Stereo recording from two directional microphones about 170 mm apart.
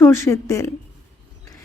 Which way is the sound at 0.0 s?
15° left (ahead or behind).